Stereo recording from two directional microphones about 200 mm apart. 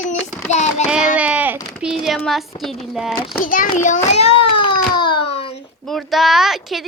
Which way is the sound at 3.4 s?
45° left (ahead or behind).